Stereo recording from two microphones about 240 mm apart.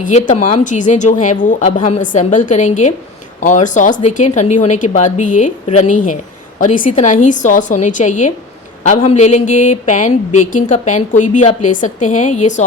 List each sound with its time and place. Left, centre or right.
0.0 s speech: left